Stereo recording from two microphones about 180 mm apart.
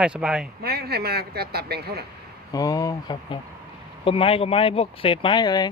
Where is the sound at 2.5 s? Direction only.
20° left (ahead or behind).